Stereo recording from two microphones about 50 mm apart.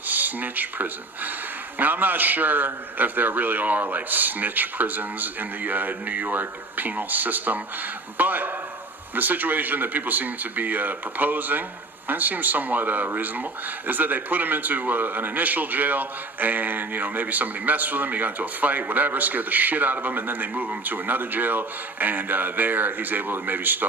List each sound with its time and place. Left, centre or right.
0.1 s speech: right